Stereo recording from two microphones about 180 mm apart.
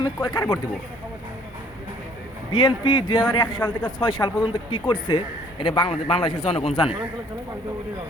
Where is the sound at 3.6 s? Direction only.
15° left (ahead or behind).